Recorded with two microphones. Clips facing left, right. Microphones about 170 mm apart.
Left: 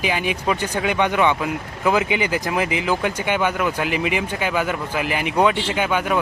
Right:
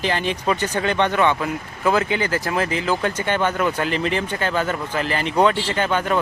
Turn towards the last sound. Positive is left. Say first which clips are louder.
# even
turn(degrees=10)  # may be behind; listen again after turning